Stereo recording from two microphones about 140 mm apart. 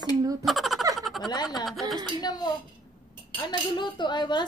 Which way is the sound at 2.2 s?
30° left (ahead or behind).